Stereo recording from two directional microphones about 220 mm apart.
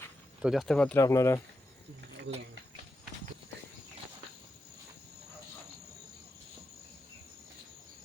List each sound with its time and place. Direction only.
0.4 s speech: centre (ahead or behind)
2.3 s speech: 55° right (ahead or behind)